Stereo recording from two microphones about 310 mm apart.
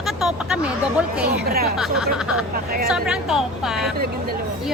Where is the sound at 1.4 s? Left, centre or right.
Right.